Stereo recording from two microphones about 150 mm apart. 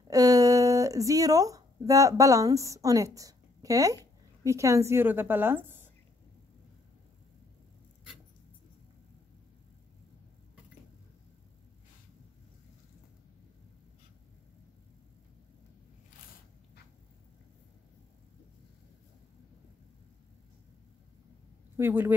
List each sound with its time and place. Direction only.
0.1 s speech: 25° right (ahead or behind)
21.7 s speech: 15° right (ahead or behind)